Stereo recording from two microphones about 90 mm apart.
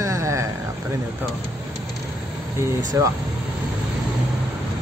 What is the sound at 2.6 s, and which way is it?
Speech, 35° right (ahead or behind).